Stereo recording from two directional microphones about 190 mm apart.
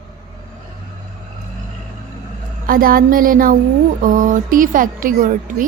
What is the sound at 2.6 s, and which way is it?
A woman's voice, 50° right (ahead or behind).